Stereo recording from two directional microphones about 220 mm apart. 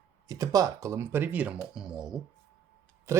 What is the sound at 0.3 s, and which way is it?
Speech, 15° right (ahead or behind).